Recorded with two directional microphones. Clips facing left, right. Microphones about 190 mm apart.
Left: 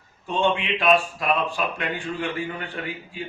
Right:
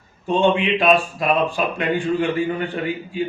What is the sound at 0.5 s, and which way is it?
Speech, 20° right (ahead or behind).